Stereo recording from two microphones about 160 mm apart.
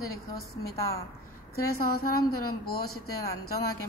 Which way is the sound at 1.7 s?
70° left (ahead or behind).